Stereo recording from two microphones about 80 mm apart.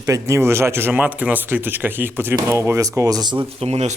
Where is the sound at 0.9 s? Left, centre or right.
Centre; by 3.4 s right.